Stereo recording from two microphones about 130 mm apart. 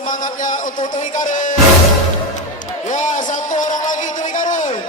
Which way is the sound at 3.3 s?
75° left (ahead or behind).